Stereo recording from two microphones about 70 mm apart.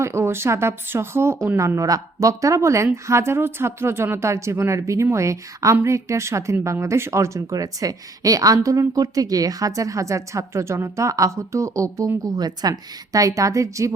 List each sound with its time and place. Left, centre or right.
0.0 s speech: right
12.3 s speech: right